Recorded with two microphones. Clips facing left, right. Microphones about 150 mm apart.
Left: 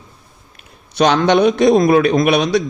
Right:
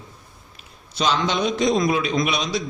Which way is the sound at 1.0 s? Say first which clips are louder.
Left 9 dB; 65° left (ahead or behind).